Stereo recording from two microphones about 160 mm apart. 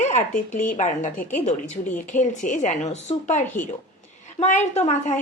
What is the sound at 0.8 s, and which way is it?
A woman's voice, 50° left (ahead or behind).